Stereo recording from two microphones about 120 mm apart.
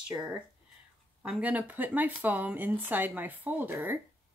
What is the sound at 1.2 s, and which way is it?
Speech, 10° right (ahead or behind).